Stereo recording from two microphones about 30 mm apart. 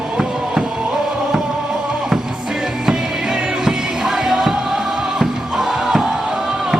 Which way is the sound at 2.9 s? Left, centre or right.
Right.